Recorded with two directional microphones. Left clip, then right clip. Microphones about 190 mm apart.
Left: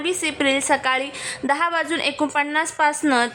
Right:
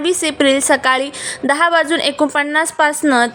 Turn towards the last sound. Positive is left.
turn(degrees=-20)  # may be behind; listen again after turning